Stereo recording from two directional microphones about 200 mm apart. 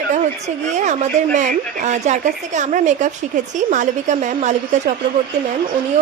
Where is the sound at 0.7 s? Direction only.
35° right (ahead or behind).